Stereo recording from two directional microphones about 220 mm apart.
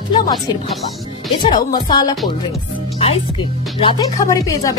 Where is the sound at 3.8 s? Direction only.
15° left (ahead or behind).